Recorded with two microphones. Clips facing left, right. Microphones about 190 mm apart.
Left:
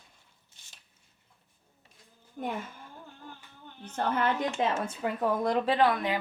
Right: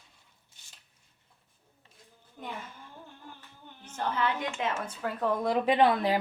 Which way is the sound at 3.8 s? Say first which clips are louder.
Left 2 dB; 55° left (ahead or behind).